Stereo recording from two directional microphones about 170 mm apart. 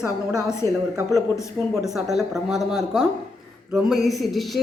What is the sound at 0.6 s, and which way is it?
Speech, 15° left (ahead or behind).